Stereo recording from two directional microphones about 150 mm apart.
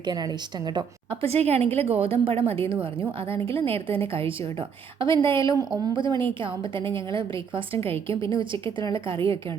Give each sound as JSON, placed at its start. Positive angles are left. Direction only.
{"t": 0.7, "sound": "a woman's voice", "side_deg": -30}
{"t": 1.3, "sound": "a woman's voice", "side_deg": -45}
{"t": 5.5, "sound": "a woman's voice", "side_deg": -25}